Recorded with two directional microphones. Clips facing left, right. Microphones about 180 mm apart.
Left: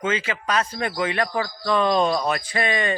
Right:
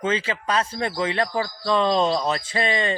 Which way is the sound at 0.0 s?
30° right (ahead or behind).